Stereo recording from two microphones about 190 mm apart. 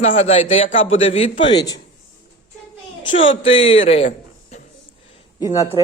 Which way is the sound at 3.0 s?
25° left (ahead or behind).